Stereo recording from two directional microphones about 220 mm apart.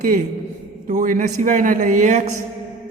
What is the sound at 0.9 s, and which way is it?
Speech, 35° right (ahead or behind).